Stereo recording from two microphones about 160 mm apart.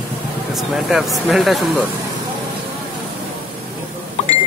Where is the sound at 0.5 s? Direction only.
Centre (ahead or behind).